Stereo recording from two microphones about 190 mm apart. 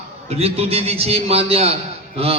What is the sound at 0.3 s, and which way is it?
A man's voice, 30° right (ahead or behind).